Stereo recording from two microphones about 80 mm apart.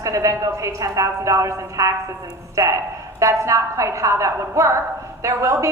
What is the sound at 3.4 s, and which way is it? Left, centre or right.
A woman's voice, right.